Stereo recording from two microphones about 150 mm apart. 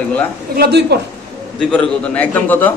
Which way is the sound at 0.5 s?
90° right.